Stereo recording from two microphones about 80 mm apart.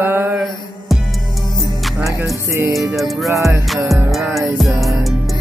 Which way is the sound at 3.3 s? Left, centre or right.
Right.